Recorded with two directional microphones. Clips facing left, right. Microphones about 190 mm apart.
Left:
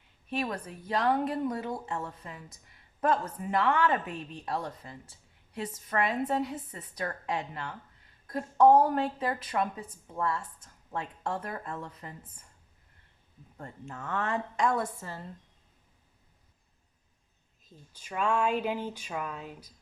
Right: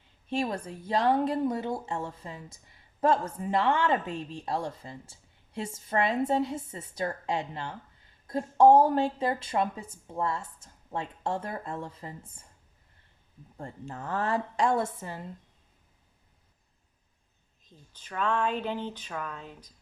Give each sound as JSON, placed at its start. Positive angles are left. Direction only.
{"t": 0.3, "sound": "a woman's voice", "side_deg": -25}
{"t": 13.6, "sound": "a woman's voice", "side_deg": -35}
{"t": 17.7, "sound": "speech", "side_deg": 10}